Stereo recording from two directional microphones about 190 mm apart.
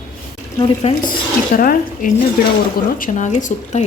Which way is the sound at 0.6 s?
30° left (ahead or behind).